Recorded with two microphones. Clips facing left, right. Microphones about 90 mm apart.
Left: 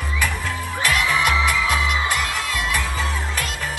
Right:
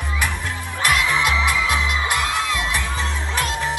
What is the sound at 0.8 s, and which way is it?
Music, 20° right (ahead or behind).